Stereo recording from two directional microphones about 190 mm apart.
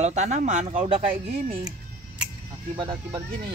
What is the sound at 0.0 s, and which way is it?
Speech, 40° right (ahead or behind).